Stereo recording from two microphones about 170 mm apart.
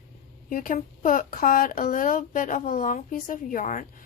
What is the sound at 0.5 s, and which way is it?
Speech, 55° left (ahead or behind).